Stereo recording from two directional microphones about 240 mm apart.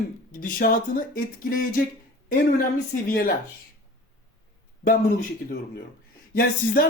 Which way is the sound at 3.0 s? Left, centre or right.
Left.